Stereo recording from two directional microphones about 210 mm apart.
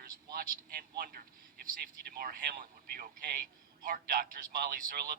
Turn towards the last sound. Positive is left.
turn(degrees=-45)  # may be behind; listen again after turning